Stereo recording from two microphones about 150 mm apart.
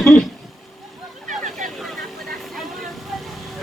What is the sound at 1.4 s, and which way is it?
Vehicle, 55° right (ahead or behind).